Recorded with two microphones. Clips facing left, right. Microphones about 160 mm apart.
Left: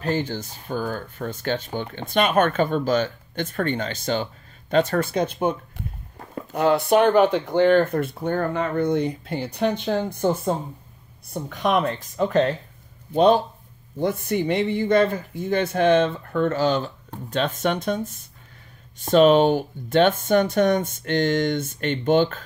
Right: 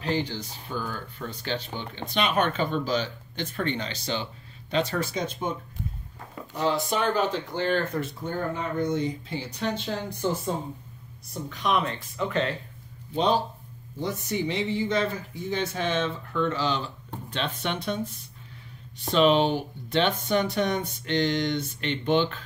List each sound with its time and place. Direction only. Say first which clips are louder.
0.0 s speech: left 3 dB; 45° left (ahead or behind)
13.1 s speech: left 7 dB; 55° left (ahead or behind)